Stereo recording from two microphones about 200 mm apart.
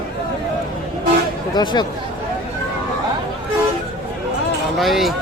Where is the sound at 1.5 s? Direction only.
20° left (ahead or behind).